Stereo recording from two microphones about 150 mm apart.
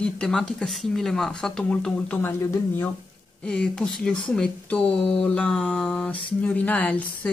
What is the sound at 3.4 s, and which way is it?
Speech, 5° left (ahead or behind).